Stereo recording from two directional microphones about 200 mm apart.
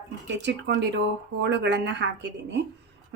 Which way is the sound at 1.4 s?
60° right (ahead or behind).